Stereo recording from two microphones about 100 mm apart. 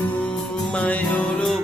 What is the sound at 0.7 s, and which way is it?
Music, 15° left (ahead or behind).